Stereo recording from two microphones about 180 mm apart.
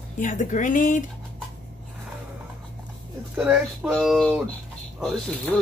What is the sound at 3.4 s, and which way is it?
Speech, 5° right (ahead or behind).